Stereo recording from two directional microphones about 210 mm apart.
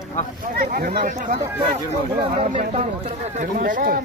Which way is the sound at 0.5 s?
45° right (ahead or behind).